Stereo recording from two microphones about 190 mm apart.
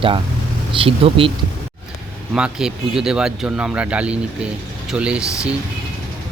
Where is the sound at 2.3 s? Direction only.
5° right (ahead or behind).